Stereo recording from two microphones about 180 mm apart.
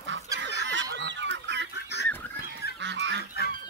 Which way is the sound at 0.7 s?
80° right.